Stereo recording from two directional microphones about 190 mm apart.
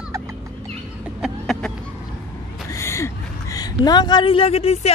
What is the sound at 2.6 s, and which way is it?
A woman's voice, 15° left (ahead or behind).